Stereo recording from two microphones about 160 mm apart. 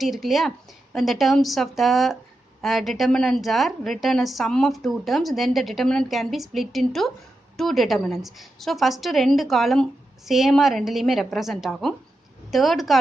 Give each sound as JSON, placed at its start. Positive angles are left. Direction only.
{"t": 0.0, "sound": "a woman's voice", "side_deg": 0}